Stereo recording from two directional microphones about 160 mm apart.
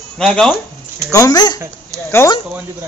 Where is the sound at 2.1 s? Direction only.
15° left (ahead or behind).